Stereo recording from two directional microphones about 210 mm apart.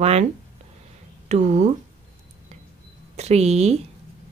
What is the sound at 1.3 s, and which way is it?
Speech, 35° right (ahead or behind).